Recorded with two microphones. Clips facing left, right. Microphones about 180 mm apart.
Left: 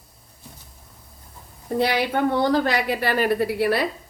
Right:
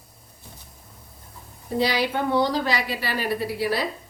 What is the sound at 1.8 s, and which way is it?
A woman's voice, 55° left (ahead or behind).